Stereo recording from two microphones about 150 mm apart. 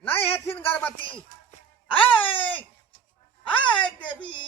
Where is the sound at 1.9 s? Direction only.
35° left (ahead or behind).